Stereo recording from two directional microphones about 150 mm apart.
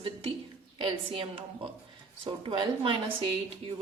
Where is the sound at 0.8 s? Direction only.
35° right (ahead or behind).